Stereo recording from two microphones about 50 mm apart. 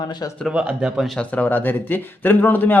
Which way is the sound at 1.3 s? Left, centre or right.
Left.